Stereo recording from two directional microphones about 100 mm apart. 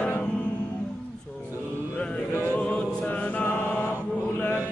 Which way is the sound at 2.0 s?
20° left (ahead or behind).